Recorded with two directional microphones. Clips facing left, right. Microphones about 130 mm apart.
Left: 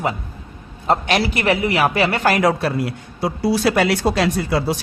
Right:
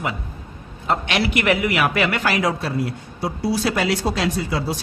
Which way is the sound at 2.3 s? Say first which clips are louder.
Left 4 dB; 60° left (ahead or behind).